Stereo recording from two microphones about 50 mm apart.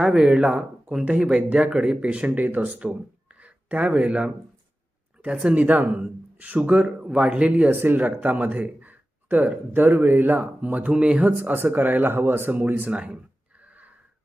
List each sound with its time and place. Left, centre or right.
0.0 s speech: centre
0.3 s speech: right
5.3 s speech: centre
5.5 s speech: right
7.7 s speech: right
10.9 s speech: right
11.3 s speech: right
12.9 s speech: right
13.6 s gasp: right